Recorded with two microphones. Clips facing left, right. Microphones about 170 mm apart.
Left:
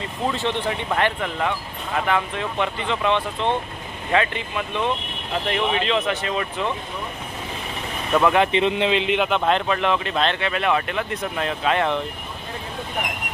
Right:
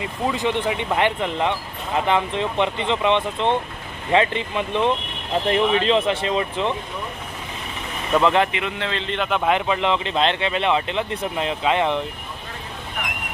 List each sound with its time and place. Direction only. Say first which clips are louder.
0.0 s speech: right 1 dB; 10° right (ahead or behind)
8.2 s speech: even; 10° left (ahead or behind)
8.5 s speech: left 7 dB; 20° left (ahead or behind)
9.3 s speech: even; 5° right (ahead or behind)